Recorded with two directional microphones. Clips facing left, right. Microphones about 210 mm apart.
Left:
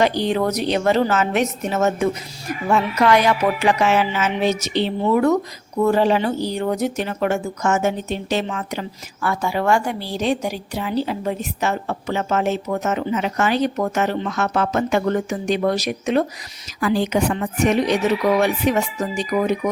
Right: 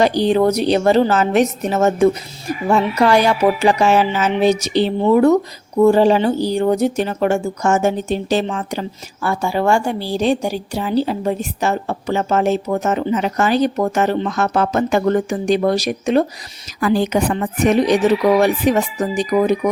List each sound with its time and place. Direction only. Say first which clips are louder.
0.0 s speech: right 5 dB; 35° right (ahead or behind)